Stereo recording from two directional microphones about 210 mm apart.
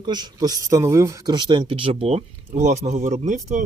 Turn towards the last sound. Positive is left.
turn(degrees=-35)  # may be behind; listen again after turning